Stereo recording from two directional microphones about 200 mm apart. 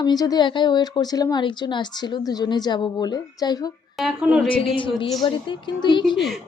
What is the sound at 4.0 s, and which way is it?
Speech, centre (ahead or behind).